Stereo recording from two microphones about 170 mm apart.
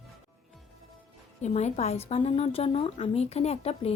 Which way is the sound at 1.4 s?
40° left (ahead or behind).